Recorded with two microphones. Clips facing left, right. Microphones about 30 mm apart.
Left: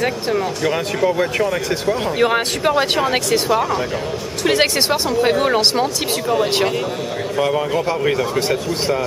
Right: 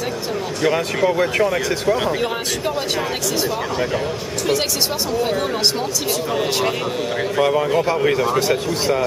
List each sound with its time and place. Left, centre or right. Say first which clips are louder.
0.6 s speech: right 1 dB; centre
2.3 s speech: left 5 dB; left
5.2 s speech: left 4 dB; left
6.3 s speech: left 4 dB; centre
8.4 s speech: even; centre